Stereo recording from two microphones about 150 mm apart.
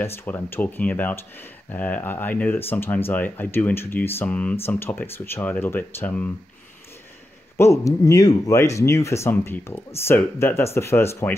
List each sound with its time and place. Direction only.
0.0 s speech: 15° left (ahead or behind)
7.5 s speech: 20° left (ahead or behind)